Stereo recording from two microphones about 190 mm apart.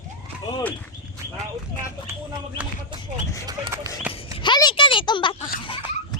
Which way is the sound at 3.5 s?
20° right (ahead or behind).